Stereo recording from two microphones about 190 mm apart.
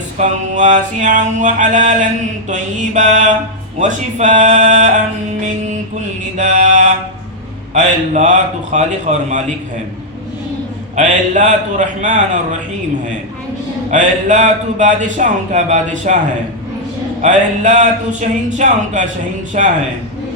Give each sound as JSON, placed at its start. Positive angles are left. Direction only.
{"t": 0.2, "sound": "mantra", "side_deg": -40}
{"t": 6.3, "sound": "mantra", "side_deg": -40}
{"t": 10.9, "sound": "mantra", "side_deg": -40}
{"t": 13.9, "sound": "mantra", "side_deg": -40}
{"t": 17.2, "sound": "mantra", "side_deg": -40}